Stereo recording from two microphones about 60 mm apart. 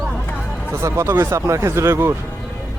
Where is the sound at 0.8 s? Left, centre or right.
Right.